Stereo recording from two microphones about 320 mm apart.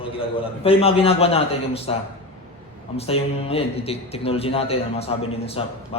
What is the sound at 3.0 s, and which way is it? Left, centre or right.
Speech, centre.